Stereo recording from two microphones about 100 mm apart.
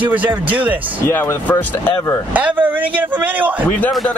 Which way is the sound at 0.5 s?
15° right (ahead or behind).